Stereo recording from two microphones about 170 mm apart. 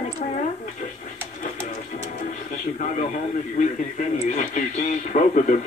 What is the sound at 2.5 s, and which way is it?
Speech, 50° left (ahead or behind).